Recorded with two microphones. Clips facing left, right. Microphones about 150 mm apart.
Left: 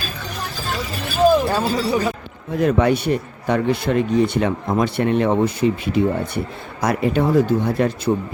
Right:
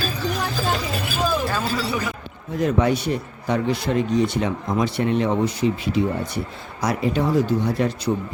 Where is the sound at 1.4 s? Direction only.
30° left (ahead or behind).